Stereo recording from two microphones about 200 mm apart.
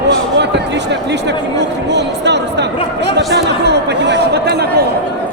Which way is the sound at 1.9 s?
60° right (ahead or behind).